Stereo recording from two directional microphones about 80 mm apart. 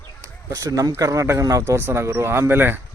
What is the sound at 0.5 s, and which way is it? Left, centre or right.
Speech, right.